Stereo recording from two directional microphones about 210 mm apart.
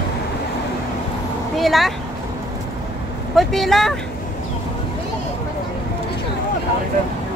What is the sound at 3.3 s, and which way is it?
Speech, centre (ahead or behind).